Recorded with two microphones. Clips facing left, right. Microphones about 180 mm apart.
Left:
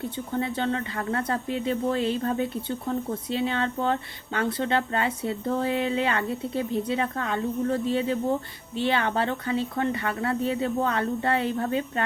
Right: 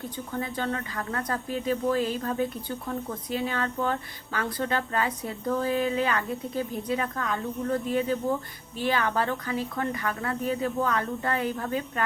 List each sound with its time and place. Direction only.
0.3 s speech: 25° left (ahead or behind)